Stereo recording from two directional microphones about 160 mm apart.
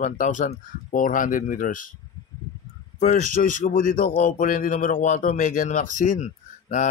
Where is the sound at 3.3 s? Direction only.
55° left (ahead or behind).